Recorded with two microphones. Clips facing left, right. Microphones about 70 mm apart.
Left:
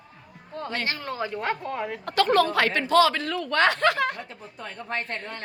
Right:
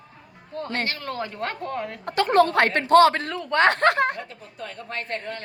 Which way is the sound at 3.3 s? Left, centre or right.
Right.